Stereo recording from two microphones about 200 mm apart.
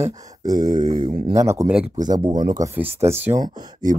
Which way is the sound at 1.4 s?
15° right (ahead or behind).